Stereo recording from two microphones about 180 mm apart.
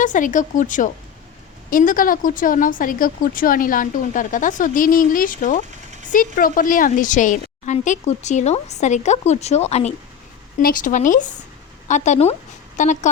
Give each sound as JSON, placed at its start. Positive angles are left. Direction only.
{"t": 0.0, "sound": "a woman's voice", "side_deg": 45}
{"t": 10.6, "sound": "a woman's voice", "side_deg": 50}